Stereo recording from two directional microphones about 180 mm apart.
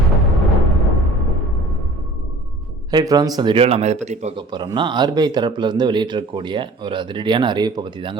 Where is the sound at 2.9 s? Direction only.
20° right (ahead or behind); by 4.3 s 40° right (ahead or behind).